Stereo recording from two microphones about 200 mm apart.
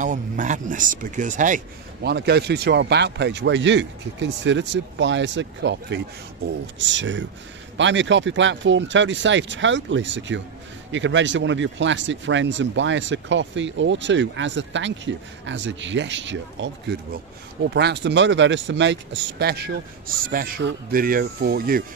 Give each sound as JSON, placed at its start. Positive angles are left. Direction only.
{"t": 0.0, "sound": "speech", "side_deg": -40}
{"t": 2.0, "sound": "speech", "side_deg": -55}